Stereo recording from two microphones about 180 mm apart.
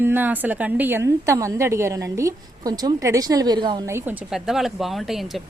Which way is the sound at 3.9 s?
15° right (ahead or behind).